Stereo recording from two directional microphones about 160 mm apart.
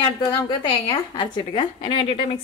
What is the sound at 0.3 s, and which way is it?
A woman's voice, 30° left (ahead or behind).